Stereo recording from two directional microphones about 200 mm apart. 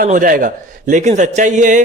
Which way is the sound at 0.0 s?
45° right (ahead or behind).